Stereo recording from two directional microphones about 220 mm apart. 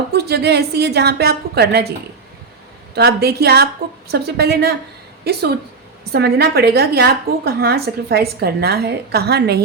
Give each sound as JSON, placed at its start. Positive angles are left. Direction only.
{"t": 0.1, "sound": "a woman's voice", "side_deg": -50}
{"t": 2.9, "sound": "a woman's voice", "side_deg": -45}